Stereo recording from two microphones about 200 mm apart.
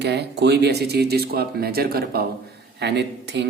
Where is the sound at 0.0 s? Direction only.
60° right (ahead or behind).